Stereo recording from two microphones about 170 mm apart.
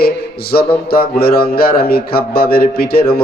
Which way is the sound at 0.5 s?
65° left (ahead or behind).